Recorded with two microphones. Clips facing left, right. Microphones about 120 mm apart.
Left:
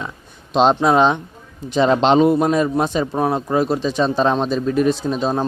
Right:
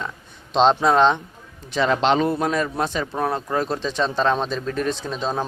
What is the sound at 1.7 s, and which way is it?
Speech, 25° left (ahead or behind).